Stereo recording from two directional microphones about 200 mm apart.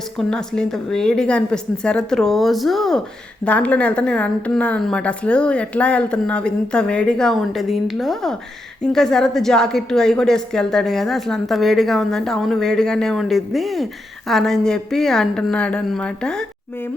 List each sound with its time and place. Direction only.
0.2 s a woman's voice: 5° left (ahead or behind)